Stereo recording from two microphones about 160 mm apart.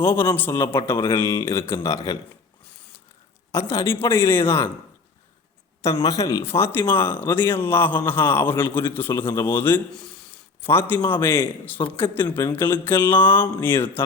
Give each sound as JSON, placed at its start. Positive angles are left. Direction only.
{"t": 0.0, "sound": "speech", "side_deg": 15}
{"t": 3.5, "sound": "speech", "side_deg": 15}
{"t": 5.9, "sound": "speech", "side_deg": 25}